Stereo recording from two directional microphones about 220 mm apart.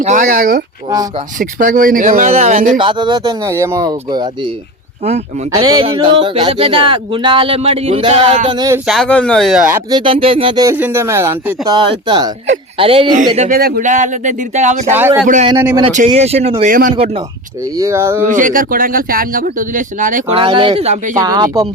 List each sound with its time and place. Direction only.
0.0 s speech: 35° right (ahead or behind)
2.7 s speech: 20° right (ahead or behind)
5.5 s speech: 20° right (ahead or behind)
8.4 s speech: 15° right (ahead or behind)
8.9 s speech: 5° left (ahead or behind)
10.0 s speech: 25° right (ahead or behind)
15.4 s speech: 20° right (ahead or behind)
15.9 s speech: 30° right (ahead or behind)
16.9 s speech: 25° right (ahead or behind)
17.7 s speech: 10° right (ahead or behind)
18.3 s speech: 35° right (ahead or behind)
20.3 s speech: 25° right (ahead or behind)
21.2 s speech: 15° right (ahead or behind)